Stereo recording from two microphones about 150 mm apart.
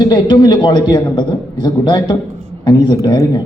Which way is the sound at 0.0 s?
30° left (ahead or behind).